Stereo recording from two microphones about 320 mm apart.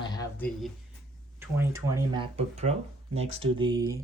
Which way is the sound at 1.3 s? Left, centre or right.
Centre.